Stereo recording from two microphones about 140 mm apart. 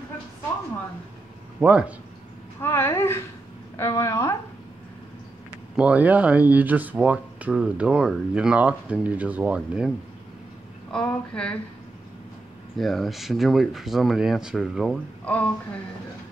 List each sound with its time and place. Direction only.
1.6 s speech: 10° right (ahead or behind)
2.6 s a woman's voice: 15° left (ahead or behind)
5.8 s speech: 10° right (ahead or behind)
10.9 s a woman's voice: 5° left (ahead or behind)
12.7 s speech: centre (ahead or behind)
15.2 s a woman's voice: 10° left (ahead or behind)